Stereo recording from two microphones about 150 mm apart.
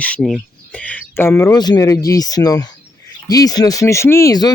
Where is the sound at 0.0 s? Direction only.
5° left (ahead or behind).